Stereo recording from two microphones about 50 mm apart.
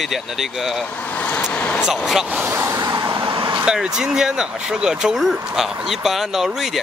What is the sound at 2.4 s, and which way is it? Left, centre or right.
Vehicle, right.